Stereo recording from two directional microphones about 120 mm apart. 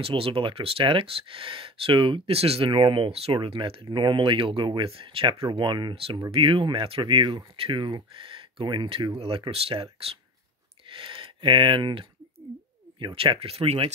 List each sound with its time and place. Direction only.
0.0 s speech: 45° right (ahead or behind)